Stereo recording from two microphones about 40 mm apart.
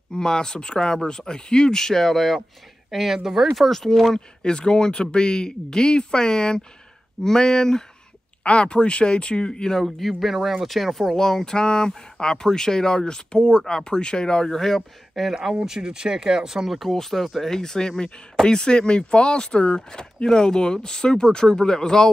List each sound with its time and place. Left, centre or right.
0.1 s speech: centre
8.5 s speech: left; by 11.1 s centre
11.1 s speech: centre
15.3 s speech: centre
16.9 s speech: centre